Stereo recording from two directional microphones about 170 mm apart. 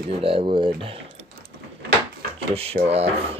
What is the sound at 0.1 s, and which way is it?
Speech, 30° right (ahead or behind).